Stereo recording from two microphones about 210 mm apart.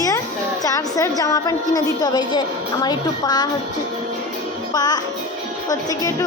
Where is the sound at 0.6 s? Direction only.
15° left (ahead or behind).